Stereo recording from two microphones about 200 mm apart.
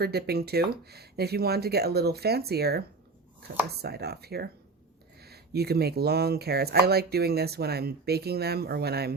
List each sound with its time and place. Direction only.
0.0 s speech: 50° right (ahead or behind)